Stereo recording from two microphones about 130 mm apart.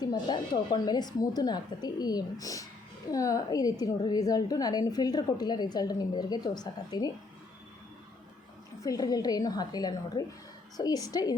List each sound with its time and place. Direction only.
0.0 s a woman's voice: 35° left (ahead or behind)
8.8 s a woman's voice: 30° left (ahead or behind)